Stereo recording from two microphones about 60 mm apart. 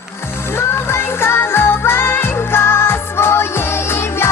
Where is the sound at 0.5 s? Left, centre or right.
Left.